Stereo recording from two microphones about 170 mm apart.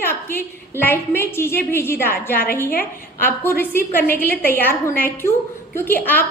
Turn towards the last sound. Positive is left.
turn(degrees=10)  # may be behind; listen again after turning